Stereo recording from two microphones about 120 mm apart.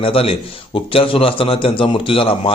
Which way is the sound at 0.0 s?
50° left (ahead or behind).